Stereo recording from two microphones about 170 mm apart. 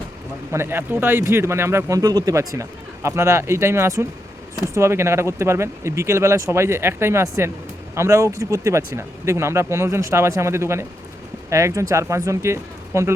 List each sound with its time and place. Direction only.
0.5 s speech: 15° right (ahead or behind)